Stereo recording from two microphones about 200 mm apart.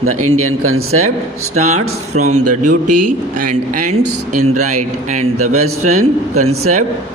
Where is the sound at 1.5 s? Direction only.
35° right (ahead or behind).